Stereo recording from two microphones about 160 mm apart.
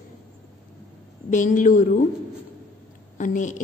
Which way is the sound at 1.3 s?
50° left (ahead or behind).